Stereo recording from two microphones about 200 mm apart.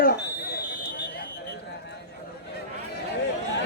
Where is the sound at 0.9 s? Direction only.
50° left (ahead or behind).